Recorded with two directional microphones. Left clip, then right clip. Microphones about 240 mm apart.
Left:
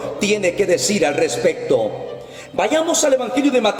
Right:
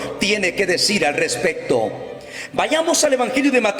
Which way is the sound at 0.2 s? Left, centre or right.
Centre.